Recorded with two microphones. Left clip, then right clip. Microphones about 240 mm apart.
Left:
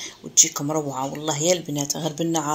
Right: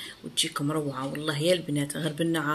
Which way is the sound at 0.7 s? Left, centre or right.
Left.